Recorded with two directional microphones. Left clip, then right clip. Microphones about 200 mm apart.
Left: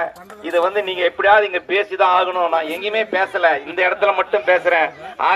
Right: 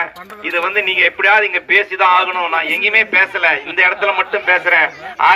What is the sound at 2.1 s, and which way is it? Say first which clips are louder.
A man's voice: right 2 dB; 55° right (ahead or behind).